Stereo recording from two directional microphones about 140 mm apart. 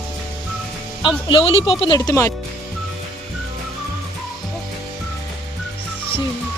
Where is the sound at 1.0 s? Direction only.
35° left (ahead or behind).